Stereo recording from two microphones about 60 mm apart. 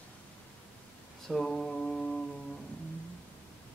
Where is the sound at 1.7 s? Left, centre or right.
Centre.